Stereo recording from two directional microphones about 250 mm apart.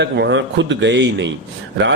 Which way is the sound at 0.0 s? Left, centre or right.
Right.